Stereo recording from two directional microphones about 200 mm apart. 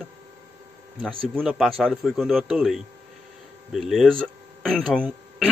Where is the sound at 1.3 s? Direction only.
Centre (ahead or behind).